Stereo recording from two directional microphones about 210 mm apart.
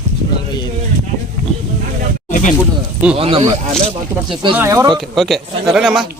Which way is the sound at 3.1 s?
25° right (ahead or behind).